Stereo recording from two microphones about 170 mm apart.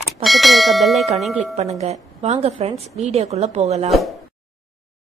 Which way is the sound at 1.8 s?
40° right (ahead or behind).